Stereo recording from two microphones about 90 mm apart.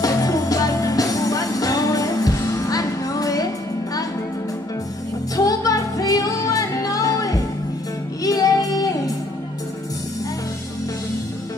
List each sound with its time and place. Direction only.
0.0 s music: 40° left (ahead or behind)
5.3 s music: 40° left (ahead or behind)